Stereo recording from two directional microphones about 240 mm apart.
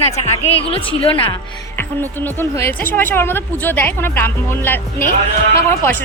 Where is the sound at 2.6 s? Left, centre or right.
Centre.